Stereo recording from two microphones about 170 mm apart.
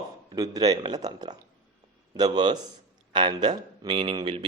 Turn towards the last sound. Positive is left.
turn(degrees=-30)  # may be behind; listen again after turning